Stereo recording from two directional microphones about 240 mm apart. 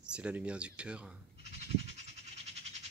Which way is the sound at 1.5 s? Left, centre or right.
Right.